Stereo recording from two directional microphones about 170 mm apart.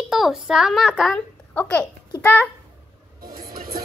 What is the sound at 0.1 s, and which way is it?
A woman's voice, centre (ahead or behind).